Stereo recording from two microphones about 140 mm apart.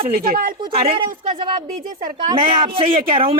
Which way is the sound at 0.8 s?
40° right (ahead or behind).